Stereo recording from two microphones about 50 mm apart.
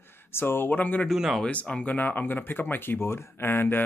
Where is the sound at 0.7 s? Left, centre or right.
Left.